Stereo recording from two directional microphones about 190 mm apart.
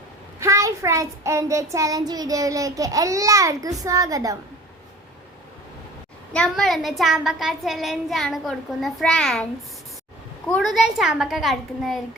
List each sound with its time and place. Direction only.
0.3 s a child's voice: 15° right (ahead or behind)
6.3 s a child's voice: 5° left (ahead or behind)
10.5 s a child's voice: centre (ahead or behind)